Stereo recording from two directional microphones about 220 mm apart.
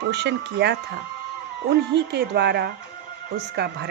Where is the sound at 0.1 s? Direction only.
50° right (ahead or behind).